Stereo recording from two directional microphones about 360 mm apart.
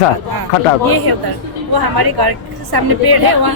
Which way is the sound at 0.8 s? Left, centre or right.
Right.